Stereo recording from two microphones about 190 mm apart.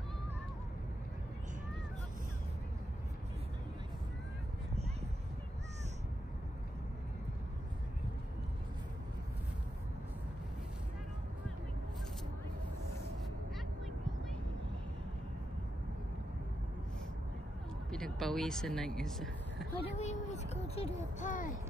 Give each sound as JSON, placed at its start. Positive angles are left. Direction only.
{"t": 17.9, "sound": "speech", "side_deg": 0}
{"t": 20.0, "sound": "speech", "side_deg": 35}